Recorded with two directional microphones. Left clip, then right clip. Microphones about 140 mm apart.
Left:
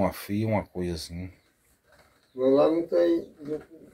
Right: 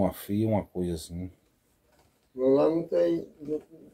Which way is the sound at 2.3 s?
Centre (ahead or behind).